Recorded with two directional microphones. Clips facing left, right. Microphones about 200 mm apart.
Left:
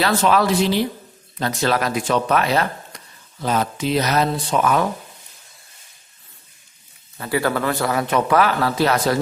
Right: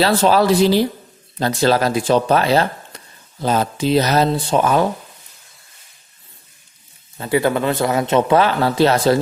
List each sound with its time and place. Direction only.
0.0 s speech: 30° right (ahead or behind)
7.2 s a man's voice: 20° right (ahead or behind)